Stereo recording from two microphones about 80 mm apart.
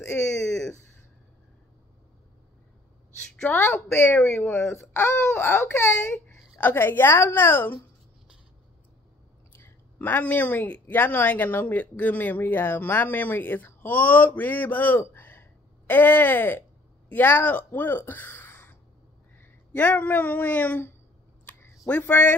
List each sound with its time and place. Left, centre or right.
0.5 s a sound: centre
3.5 s speech: left
4.5 s a man's voice: centre
4.7 s speech: left
9.5 s a man's voice: left